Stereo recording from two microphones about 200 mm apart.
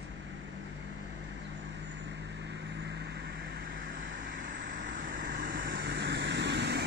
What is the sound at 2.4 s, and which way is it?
Vehicle, 60° right (ahead or behind).